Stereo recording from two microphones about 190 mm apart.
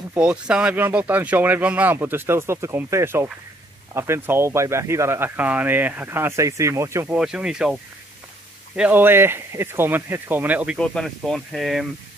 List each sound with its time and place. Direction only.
0.1 s speech: 5° right (ahead or behind)
7.2 s speech: 5° right (ahead or behind)
10.8 s speech: 5° left (ahead or behind)